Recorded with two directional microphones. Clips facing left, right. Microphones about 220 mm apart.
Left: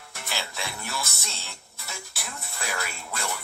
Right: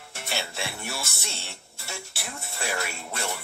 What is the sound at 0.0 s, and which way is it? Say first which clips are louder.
Music: right 2 dB; 30° right (ahead or behind).